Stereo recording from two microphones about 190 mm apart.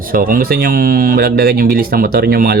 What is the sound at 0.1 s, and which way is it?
Speech, 50° right (ahead or behind).